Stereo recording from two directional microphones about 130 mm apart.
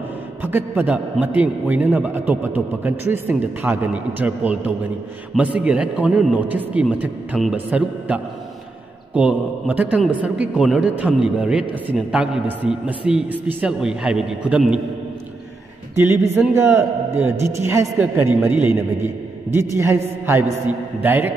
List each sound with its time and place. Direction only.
0.4 s a man's voice: 15° right (ahead or behind)
16.0 s a man's voice: 15° right (ahead or behind)